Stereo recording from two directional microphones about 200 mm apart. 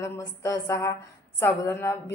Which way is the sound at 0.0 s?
15° left (ahead or behind).